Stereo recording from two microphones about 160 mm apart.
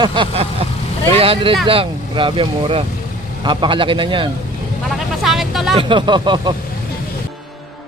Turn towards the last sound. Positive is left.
turn(degrees=-30)  # may be behind; listen again after turning